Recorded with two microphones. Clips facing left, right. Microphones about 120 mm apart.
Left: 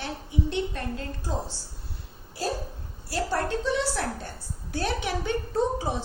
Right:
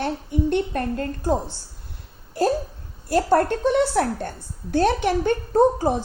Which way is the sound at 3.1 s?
55° right (ahead or behind).